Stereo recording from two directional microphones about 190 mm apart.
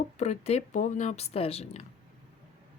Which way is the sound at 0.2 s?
35° left (ahead or behind).